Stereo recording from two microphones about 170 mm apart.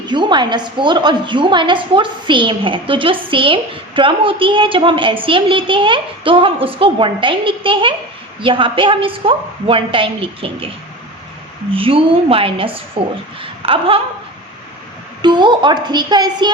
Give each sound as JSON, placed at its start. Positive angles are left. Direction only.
{"t": 0.1, "sound": "a woman's voice", "side_deg": -25}
{"t": 11.7, "sound": "a woman's voice", "side_deg": -30}
{"t": 15.2, "sound": "a woman's voice", "side_deg": -25}